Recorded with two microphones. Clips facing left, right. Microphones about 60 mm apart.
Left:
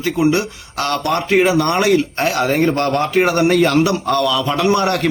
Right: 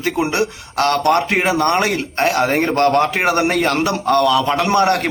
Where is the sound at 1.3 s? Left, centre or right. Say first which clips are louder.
Left 2 dB; right.